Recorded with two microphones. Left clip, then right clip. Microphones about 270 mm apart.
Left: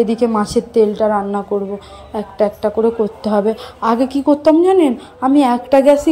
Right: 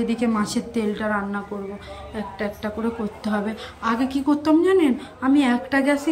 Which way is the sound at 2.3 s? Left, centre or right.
Centre.